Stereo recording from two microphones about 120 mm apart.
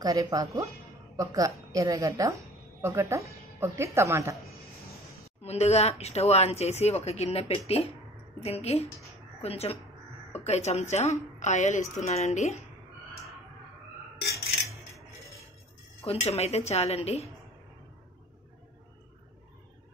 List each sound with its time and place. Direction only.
0.0 s a woman's voice: 30° right (ahead or behind)
5.4 s speech: 60° left (ahead or behind)
16.0 s speech: 60° left (ahead or behind)